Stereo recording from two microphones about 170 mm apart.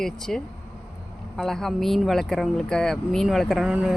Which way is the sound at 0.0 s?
5° left (ahead or behind).